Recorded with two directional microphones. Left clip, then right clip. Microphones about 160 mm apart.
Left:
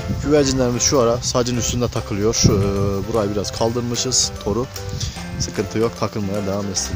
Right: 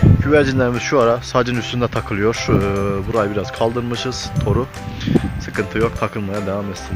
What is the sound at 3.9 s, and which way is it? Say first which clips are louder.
Speech: left 3 dB; 20° left (ahead or behind).